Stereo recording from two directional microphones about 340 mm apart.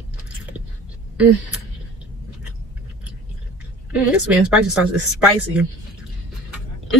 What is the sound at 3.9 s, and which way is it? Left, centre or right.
A woman's voice, centre.